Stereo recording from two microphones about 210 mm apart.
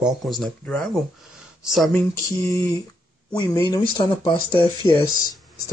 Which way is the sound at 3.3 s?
20° left (ahead or behind).